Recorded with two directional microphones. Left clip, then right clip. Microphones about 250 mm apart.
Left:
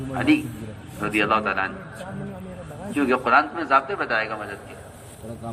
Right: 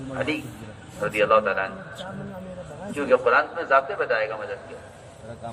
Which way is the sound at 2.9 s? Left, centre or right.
Left.